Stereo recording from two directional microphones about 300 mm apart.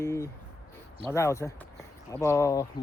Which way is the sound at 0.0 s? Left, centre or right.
Centre.